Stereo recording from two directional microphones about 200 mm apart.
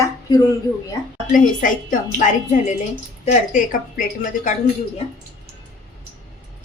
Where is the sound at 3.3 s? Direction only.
40° left (ahead or behind).